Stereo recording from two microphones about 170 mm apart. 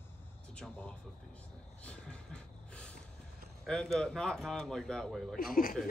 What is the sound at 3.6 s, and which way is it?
Speech, 5° left (ahead or behind).